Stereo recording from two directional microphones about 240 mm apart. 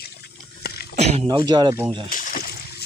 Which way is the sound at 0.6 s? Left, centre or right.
Left.